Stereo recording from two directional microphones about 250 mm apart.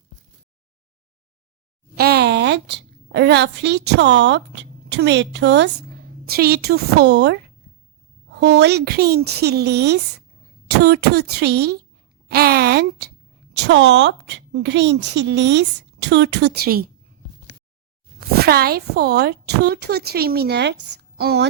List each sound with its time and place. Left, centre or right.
2.0 s a woman's voice: right
12.3 s a sound: right
13.6 s a woman's voice: right
18.2 s a woman's voice: right